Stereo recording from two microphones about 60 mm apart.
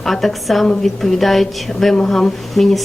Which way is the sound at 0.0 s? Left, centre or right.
Centre.